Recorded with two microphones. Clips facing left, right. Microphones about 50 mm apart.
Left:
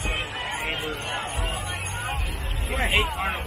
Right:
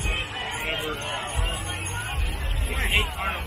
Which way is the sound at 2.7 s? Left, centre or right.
Centre.